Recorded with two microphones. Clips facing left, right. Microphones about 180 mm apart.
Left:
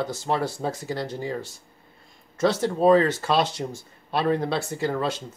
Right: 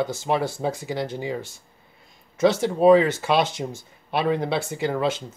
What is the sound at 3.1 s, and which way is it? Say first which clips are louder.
Speech: right 1 dB; centre (ahead or behind).